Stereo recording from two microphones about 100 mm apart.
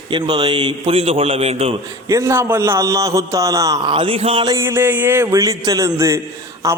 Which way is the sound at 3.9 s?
60° right (ahead or behind).